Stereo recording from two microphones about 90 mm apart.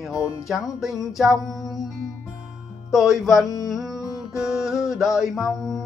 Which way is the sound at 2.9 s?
Centre (ahead or behind).